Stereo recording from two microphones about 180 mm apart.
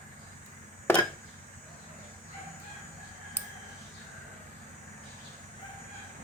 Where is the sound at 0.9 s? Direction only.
10° left (ahead or behind).